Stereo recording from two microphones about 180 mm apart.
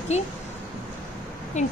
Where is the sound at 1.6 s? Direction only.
40° left (ahead or behind).